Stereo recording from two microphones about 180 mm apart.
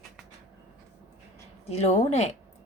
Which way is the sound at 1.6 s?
35° left (ahead or behind).